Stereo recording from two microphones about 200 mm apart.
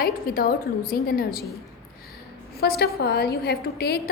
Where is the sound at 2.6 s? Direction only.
50° left (ahead or behind).